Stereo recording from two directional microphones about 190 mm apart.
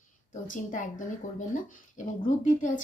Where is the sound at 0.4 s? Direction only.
45° left (ahead or behind).